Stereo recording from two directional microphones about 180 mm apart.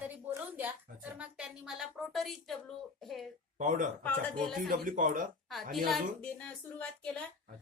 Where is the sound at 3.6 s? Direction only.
45° right (ahead or behind).